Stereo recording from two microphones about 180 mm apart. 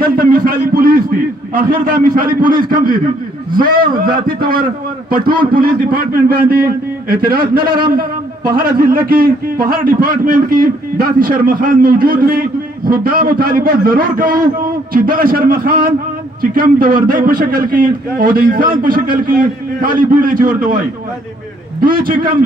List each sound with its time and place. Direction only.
0.0 s a man's voice: 55° right (ahead or behind)
21.8 s a man's voice: 50° right (ahead or behind)